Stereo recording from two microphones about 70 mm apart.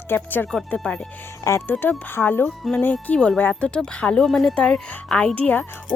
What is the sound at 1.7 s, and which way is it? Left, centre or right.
Speech, left.